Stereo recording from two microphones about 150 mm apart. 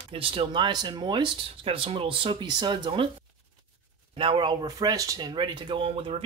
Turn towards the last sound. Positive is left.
turn(degrees=-40)  # may be behind; listen again after turning